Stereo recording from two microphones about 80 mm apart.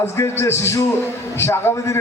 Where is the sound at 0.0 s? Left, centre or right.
Left.